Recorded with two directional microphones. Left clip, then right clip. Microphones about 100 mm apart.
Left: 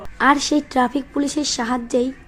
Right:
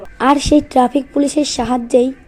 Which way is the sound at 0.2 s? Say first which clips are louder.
Right 4 dB; 35° right (ahead or behind).